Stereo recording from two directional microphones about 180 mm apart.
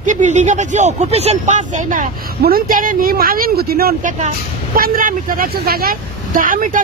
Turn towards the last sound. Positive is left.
turn(degrees=-50)  # may be behind; listen again after turning